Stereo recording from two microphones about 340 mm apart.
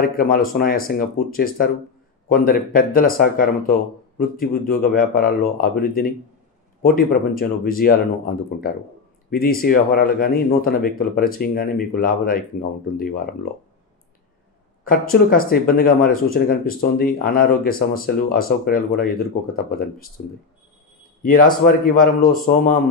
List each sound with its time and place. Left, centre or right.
0.0 s speech: left
14.9 s speech: left
21.2 s speech: left